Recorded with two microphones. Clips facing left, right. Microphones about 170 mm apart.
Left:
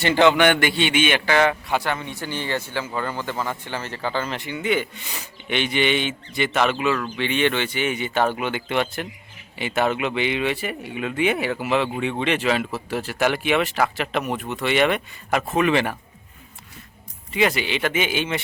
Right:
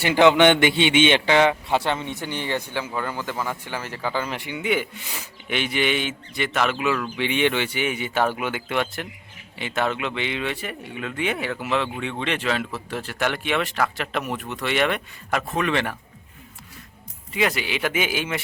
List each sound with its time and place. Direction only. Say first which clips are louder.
0.0 s a man's voice: right 1 dB; 15° right (ahead or behind); by 16.0 s 5° left (ahead or behind)
17.3 s speech: left 3 dB; centre (ahead or behind)